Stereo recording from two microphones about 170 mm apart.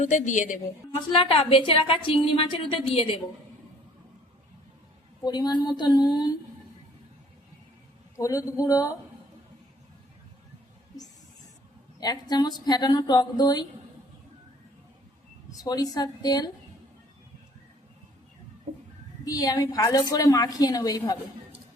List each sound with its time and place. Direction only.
0.0 s a woman's voice: 45° left (ahead or behind)
0.9 s a woman's voice: 30° left (ahead or behind)
5.2 s speech: 25° left (ahead or behind)
8.1 s speech: 20° left (ahead or behind)
11.9 s speech: 25° left (ahead or behind)
15.6 s speech: 20° left (ahead or behind)
19.2 s speech: 20° left (ahead or behind)